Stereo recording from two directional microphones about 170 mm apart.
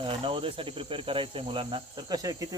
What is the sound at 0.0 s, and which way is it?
Cricket, 30° right (ahead or behind).